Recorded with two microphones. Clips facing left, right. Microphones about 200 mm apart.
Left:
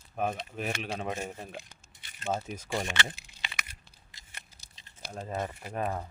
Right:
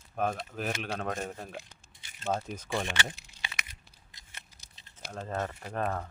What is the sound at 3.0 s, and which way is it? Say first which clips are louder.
Keys jangling: even; 5° left (ahead or behind).